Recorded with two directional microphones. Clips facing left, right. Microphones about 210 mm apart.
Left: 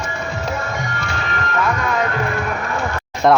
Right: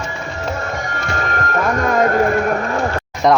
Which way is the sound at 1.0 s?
45° right (ahead or behind).